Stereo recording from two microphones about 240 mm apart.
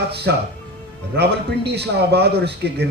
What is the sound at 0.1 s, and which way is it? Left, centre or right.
A man's voice, right.